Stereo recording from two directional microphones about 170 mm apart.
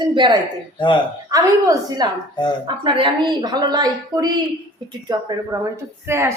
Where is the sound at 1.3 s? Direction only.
20° right (ahead or behind).